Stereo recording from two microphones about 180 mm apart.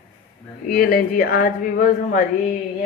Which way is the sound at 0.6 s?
55° left (ahead or behind).